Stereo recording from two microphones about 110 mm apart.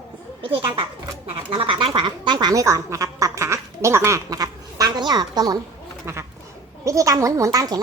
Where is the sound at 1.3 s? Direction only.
55° right (ahead or behind); by 5.5 s 35° right (ahead or behind).